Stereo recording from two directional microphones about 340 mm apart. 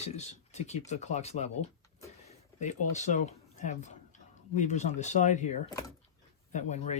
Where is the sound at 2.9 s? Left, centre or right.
Left.